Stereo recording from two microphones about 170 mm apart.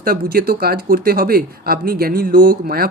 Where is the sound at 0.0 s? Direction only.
60° right (ahead or behind).